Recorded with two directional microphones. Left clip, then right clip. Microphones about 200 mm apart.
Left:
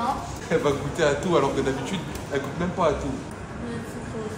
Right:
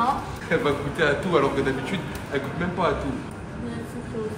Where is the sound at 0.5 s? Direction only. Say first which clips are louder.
Even; 30° left (ahead or behind).